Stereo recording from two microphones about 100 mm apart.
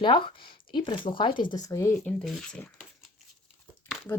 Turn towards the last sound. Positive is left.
turn(degrees=20)  # may be behind; listen again after turning